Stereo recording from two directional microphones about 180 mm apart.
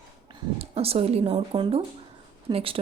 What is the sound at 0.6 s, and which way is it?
Speech, 35° right (ahead or behind).